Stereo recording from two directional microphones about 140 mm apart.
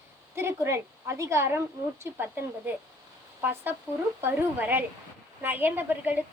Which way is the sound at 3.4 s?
15° right (ahead or behind).